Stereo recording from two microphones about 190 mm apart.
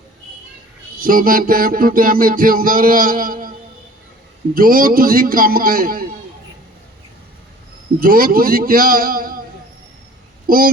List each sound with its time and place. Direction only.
1.0 s music: 45° right (ahead or behind)
4.5 s music: 50° right (ahead or behind)
7.9 s music: 50° right (ahead or behind)
10.4 s speech: 50° right (ahead or behind)